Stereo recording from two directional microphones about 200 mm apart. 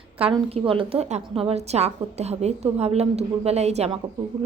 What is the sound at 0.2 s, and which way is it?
A woman's voice, 30° right (ahead or behind).